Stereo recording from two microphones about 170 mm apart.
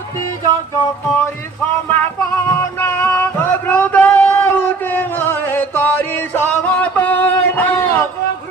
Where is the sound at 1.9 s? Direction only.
10° left (ahead or behind).